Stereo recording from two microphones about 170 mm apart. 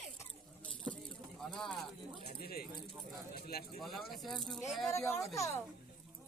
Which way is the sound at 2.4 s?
65° left (ahead or behind).